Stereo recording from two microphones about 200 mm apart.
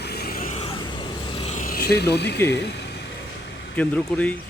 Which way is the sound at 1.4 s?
35° left (ahead or behind).